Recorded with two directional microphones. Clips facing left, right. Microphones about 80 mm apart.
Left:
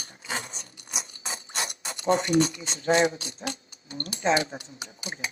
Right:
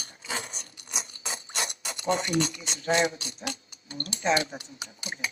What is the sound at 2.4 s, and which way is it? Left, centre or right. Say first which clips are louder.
Speech: left 5 dB; left.